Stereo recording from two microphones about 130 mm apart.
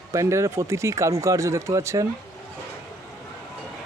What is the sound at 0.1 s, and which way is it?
Speech, 25° right (ahead or behind).